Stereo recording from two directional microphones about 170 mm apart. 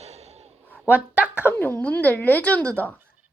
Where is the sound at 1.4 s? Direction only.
10° left (ahead or behind).